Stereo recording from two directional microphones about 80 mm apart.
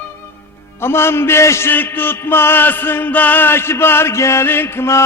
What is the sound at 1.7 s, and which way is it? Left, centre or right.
Music, left.